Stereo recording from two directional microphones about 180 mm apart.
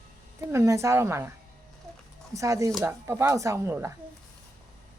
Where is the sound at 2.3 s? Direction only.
15° right (ahead or behind).